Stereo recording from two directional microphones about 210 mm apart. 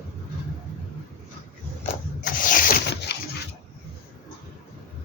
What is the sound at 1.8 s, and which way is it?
Rub, 40° left (ahead or behind).